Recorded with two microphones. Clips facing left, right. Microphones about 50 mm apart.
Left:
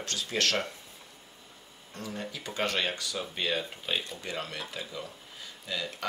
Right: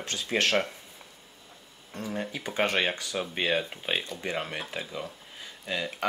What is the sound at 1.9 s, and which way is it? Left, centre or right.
Speech, right.